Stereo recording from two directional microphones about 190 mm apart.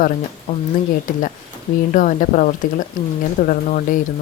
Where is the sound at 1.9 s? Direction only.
45° left (ahead or behind).